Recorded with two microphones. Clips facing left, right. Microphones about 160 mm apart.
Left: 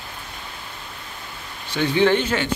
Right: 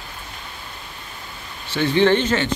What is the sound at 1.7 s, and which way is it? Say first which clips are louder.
Speech: right 1 dB; 10° left (ahead or behind).